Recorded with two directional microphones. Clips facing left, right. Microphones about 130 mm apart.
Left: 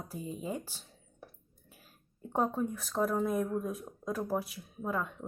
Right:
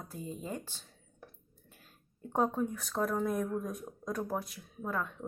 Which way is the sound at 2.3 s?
Centre (ahead or behind).